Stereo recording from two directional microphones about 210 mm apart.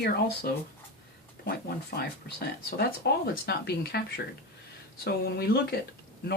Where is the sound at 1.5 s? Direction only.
50° left (ahead or behind).